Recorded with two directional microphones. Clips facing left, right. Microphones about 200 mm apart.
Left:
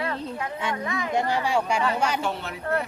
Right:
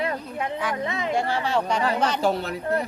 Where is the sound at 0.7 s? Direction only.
25° right (ahead or behind).